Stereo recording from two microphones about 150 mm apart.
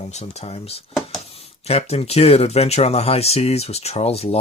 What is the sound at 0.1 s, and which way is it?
Speech, 50° left (ahead or behind).